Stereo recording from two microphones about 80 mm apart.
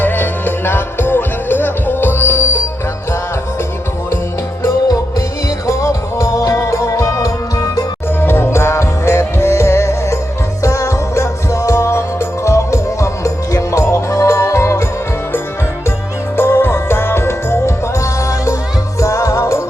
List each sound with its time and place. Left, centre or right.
0.0 s music: left
5.6 s music: left
8.2 s music: left
16.4 s music: left